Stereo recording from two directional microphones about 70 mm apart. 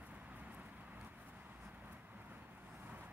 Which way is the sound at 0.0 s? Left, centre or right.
Right.